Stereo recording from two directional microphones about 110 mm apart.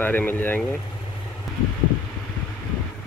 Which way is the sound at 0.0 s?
15° left (ahead or behind).